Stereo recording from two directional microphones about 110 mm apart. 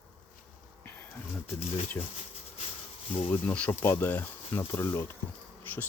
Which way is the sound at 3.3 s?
15° left (ahead or behind).